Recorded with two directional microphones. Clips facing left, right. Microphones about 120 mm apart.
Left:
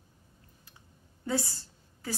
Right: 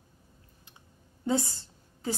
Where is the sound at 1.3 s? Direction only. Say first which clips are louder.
Right 3 dB; 20° right (ahead or behind).